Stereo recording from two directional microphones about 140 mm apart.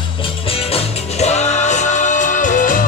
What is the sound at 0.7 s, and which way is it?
Music, 50° left (ahead or behind).